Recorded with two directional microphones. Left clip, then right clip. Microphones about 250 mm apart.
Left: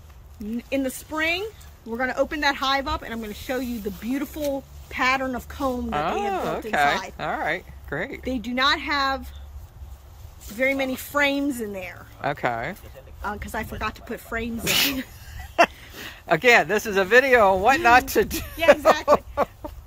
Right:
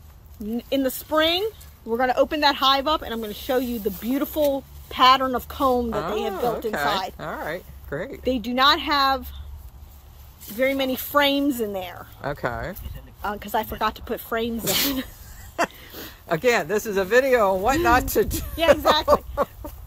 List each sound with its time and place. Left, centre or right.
0.7 s speech: centre
8.2 s speech: centre
10.4 s speech: centre
12.2 s speech: centre
14.6 s speech: centre
15.3 s a sound: centre
16.3 s speech: centre